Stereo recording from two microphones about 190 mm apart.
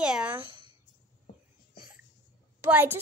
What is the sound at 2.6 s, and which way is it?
Speech, 10° right (ahead or behind).